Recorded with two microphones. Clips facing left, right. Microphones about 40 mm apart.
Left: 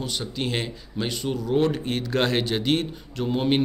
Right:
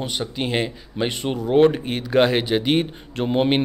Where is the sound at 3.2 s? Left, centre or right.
Right.